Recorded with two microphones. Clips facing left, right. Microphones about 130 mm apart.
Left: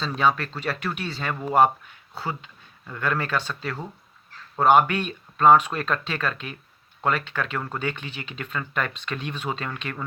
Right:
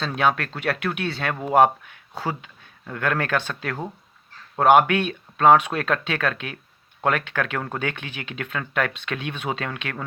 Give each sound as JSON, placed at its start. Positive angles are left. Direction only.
{"t": 0.0, "sound": "speech", "side_deg": -70}
{"t": 2.8, "sound": "speech", "side_deg": -75}